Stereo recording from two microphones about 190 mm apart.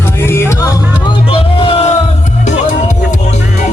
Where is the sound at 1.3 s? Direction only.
30° left (ahead or behind).